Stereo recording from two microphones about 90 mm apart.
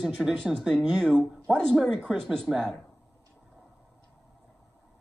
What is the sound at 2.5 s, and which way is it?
Speech, 10° left (ahead or behind).